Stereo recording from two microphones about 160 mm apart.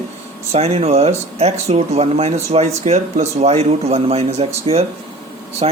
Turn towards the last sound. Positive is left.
turn(degrees=-40)  # may be behind; listen again after turning